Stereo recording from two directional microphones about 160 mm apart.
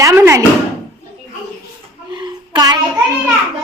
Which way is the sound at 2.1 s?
25° right (ahead or behind).